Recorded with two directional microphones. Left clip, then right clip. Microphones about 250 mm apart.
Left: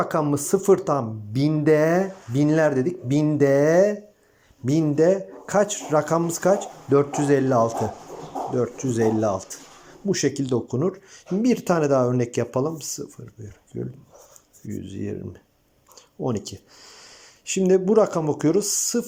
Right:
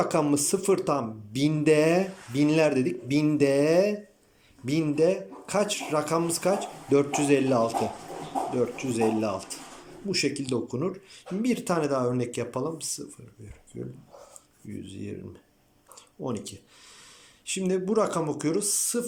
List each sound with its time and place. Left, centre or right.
0.0 s speech: centre
16.2 s speech: centre